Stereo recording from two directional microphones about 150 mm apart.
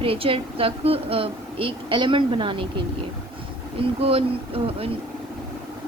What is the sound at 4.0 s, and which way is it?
Speech, 40° right (ahead or behind).